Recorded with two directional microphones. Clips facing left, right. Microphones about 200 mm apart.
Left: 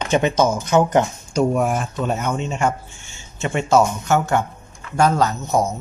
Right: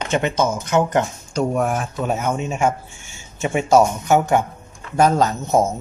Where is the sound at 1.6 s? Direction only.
Centre (ahead or behind).